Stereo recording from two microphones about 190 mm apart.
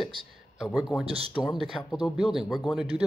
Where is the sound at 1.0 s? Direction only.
30° right (ahead or behind).